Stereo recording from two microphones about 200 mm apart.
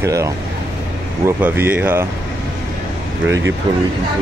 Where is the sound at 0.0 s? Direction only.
15° right (ahead or behind).